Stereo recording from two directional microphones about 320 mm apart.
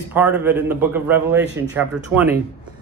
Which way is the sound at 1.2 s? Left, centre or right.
Right.